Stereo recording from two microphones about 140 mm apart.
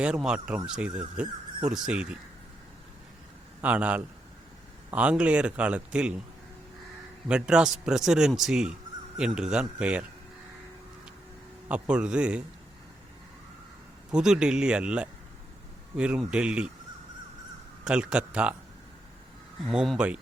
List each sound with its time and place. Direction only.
0.0 s speech: 5° right (ahead or behind)
3.6 s speech: 10° right (ahead or behind)
7.3 s a man's voice: 5° right (ahead or behind)
11.7 s speech: 5° right (ahead or behind)
14.1 s speech: 5° right (ahead or behind)
17.8 s speech: 5° right (ahead or behind)
19.6 s a man's voice: centre (ahead or behind)